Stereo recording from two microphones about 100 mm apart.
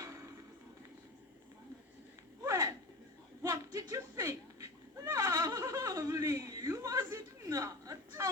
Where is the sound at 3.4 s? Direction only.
35° right (ahead or behind).